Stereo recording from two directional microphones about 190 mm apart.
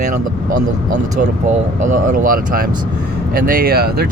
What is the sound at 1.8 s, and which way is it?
Speech, 40° right (ahead or behind).